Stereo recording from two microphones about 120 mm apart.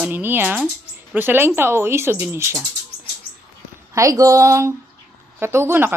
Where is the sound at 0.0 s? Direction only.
15° right (ahead or behind).